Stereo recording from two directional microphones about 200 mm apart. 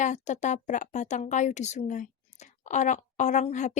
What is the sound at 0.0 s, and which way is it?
A woman's voice, 35° left (ahead or behind).